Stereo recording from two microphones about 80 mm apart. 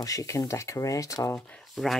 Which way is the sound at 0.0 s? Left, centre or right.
Left.